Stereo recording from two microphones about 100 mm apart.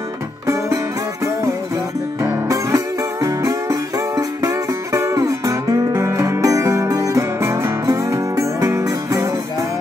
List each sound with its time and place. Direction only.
2.4 s music: 35° right (ahead or behind)